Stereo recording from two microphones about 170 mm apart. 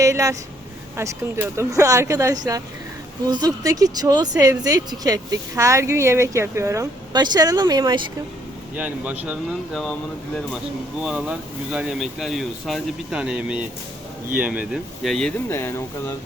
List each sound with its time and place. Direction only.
0.0 s speech: 20° right (ahead or behind)
8.7 s speech: 10° right (ahead or behind)
11.0 s speech: 5° right (ahead or behind)
15.4 s speech: 15° left (ahead or behind)